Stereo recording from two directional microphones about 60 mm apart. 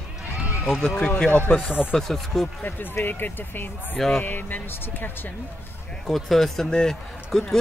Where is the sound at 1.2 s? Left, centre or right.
Left.